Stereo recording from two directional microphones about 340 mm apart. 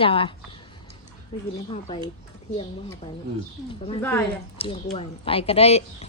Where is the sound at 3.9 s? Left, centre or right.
Centre.